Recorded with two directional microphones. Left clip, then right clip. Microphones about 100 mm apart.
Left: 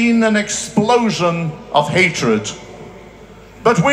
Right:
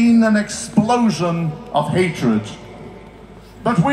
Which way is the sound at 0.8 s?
30° left (ahead or behind).